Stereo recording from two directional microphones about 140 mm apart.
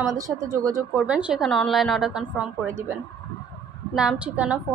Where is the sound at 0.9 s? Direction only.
10° right (ahead or behind).